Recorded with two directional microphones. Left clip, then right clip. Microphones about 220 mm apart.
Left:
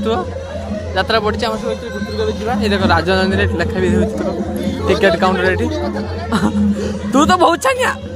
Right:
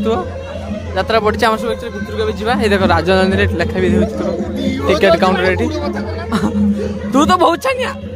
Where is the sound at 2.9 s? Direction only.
10° right (ahead or behind).